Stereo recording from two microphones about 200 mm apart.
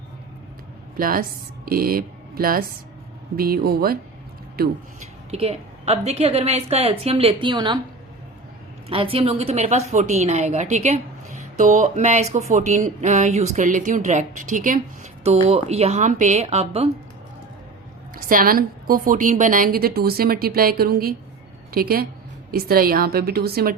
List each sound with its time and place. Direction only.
0.9 s a woman's voice: 45° right (ahead or behind)
5.3 s a woman's voice: 30° right (ahead or behind)
8.9 s a woman's voice: 25° right (ahead or behind)
18.1 s a woman's voice: 45° right (ahead or behind)